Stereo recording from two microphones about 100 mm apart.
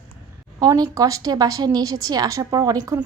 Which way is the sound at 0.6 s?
35° right (ahead or behind).